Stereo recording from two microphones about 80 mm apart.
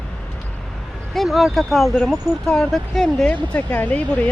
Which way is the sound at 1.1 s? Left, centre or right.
Centre.